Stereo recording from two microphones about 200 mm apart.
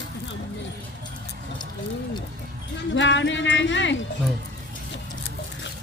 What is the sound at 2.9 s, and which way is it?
Speech, 65° left (ahead or behind).